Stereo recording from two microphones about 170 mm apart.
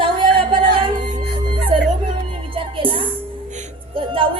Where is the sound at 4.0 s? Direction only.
30° right (ahead or behind).